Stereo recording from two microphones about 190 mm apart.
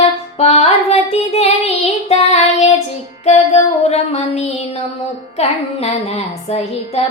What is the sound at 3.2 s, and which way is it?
Music, 35° left (ahead or behind).